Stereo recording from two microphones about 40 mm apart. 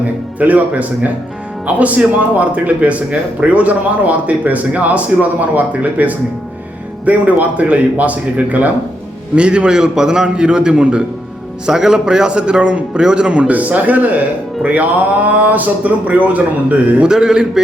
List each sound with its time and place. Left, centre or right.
0.3 s speech: right
9.3 s a man's voice: right
11.6 s a man's voice: centre
13.5 s speech: right
17.1 s a man's voice: centre